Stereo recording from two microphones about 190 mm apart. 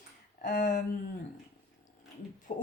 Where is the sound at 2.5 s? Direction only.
45° left (ahead or behind).